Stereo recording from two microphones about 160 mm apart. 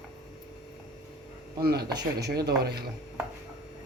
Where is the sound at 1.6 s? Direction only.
75° right (ahead or behind).